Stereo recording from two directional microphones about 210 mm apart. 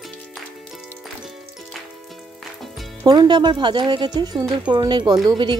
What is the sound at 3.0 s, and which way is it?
Speech, 20° right (ahead or behind).